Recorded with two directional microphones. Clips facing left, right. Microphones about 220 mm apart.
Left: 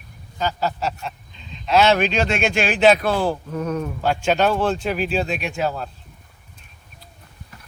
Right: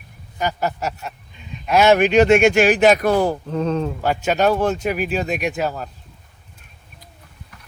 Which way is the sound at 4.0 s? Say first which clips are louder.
Left 1 dB; 10° right (ahead or behind).